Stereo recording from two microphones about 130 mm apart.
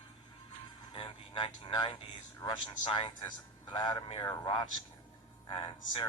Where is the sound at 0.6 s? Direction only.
35° left (ahead or behind).